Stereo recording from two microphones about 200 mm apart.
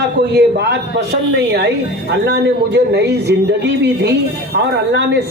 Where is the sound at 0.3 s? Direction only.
55° right (ahead or behind).